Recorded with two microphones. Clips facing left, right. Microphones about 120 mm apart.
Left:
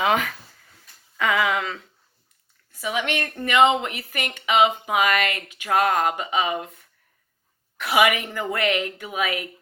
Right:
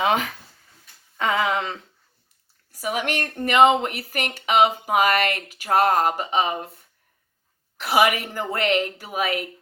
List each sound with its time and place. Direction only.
0.0 s speech: 30° right (ahead or behind)
2.7 s speech: 45° right (ahead or behind)